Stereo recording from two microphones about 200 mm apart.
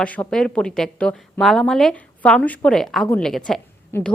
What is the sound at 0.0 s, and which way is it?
A woman's voice, 5° left (ahead or behind).